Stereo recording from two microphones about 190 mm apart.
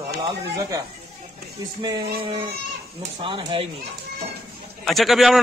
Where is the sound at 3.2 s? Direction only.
25° right (ahead or behind).